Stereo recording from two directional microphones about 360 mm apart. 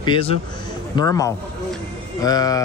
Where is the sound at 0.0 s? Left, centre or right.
Centre.